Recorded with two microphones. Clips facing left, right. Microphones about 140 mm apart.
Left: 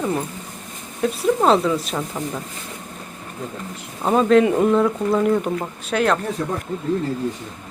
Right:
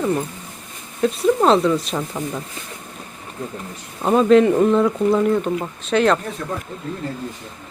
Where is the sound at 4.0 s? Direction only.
Centre (ahead or behind).